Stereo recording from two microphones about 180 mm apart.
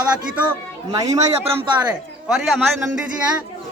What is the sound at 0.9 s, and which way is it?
Speech, 20° right (ahead or behind).